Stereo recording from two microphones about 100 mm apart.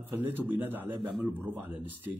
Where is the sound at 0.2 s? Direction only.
20° right (ahead or behind).